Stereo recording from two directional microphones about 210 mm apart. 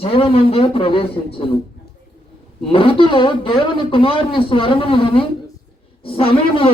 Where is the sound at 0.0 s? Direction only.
25° left (ahead or behind).